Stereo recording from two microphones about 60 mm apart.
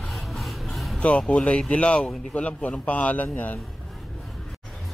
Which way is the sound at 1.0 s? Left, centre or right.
Left.